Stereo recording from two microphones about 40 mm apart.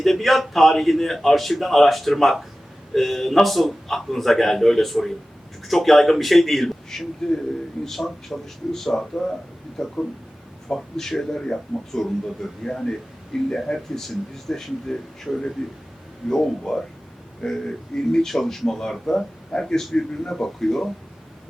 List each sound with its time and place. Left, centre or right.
0.0 s a man's voice: centre
9.0 s speech: centre